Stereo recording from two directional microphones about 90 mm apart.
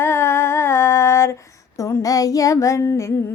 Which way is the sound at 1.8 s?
40° left (ahead or behind).